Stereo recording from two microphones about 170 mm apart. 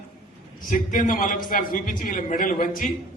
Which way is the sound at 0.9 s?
55° left (ahead or behind).